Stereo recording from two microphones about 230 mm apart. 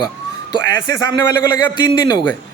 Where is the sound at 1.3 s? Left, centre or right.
Centre.